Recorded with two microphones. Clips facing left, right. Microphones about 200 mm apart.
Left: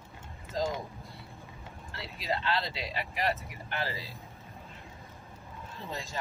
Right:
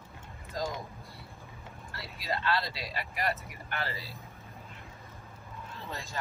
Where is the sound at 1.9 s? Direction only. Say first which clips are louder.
Left 2 dB; 20° left (ahead or behind).